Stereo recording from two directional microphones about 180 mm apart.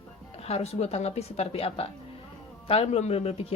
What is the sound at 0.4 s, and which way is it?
A woman's voice, 35° left (ahead or behind).